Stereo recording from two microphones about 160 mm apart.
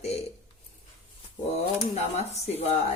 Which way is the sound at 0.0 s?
40° left (ahead or behind).